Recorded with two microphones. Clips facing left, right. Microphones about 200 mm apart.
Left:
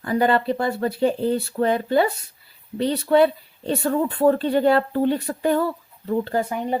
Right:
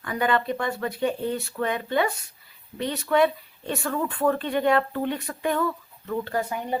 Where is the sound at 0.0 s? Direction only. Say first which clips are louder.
Left 5 dB; 35° left (ahead or behind).